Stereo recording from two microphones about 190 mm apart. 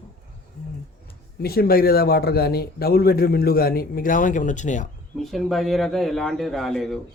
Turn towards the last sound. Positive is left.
turn(degrees=0)  # may be behind; listen again after turning